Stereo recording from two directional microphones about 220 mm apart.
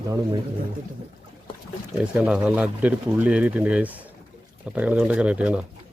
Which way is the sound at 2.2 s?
5° right (ahead or behind).